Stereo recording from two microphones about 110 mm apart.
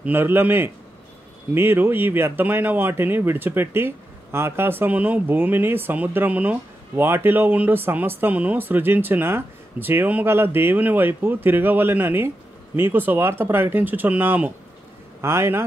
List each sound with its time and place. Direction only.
0.0 s speech: 20° right (ahead or behind)